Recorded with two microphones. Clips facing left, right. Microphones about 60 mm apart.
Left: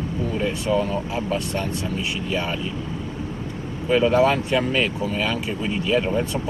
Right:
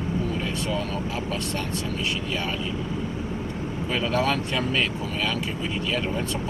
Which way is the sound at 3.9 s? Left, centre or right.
Centre.